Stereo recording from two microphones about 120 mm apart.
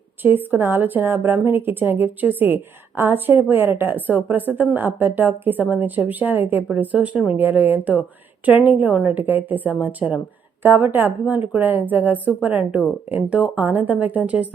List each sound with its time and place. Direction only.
0.2 s a woman's voice: 15° right (ahead or behind)